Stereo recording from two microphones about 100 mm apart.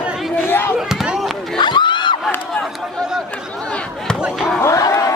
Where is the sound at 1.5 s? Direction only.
50° left (ahead or behind).